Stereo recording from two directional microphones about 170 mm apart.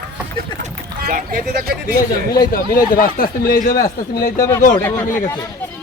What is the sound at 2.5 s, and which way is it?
Speech, 55° left (ahead or behind).